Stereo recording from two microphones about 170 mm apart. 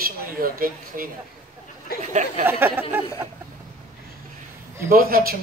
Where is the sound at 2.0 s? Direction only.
45° right (ahead or behind).